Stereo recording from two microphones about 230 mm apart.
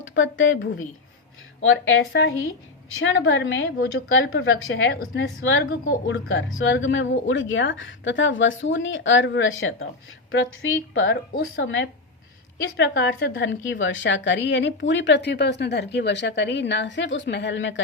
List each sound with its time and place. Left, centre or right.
0.0 s a woman's voice: left
11.0 s a woman's voice: left